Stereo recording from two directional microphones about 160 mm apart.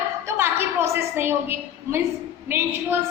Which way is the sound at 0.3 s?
15° right (ahead or behind).